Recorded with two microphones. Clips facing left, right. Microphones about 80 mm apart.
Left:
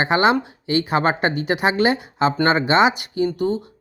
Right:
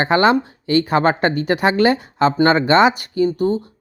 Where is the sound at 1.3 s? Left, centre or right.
Right.